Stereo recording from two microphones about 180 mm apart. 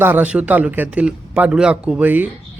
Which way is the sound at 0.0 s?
10° right (ahead or behind).